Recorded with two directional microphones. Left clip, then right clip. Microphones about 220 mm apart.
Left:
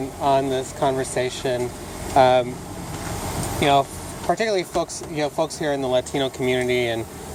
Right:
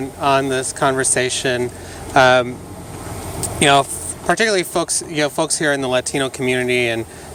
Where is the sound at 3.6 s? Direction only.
30° right (ahead or behind).